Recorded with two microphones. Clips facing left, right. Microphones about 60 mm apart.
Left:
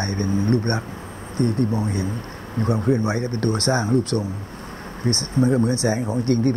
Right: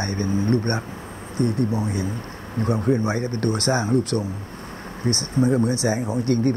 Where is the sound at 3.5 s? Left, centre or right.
Left.